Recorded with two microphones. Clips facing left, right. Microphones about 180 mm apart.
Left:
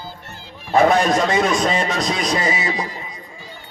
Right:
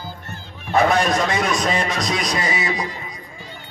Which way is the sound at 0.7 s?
30° left (ahead or behind).